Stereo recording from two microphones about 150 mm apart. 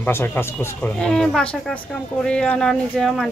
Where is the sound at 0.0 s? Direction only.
15° left (ahead or behind).